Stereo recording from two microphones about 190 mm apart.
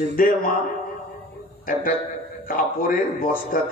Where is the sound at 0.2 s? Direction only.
50° left (ahead or behind).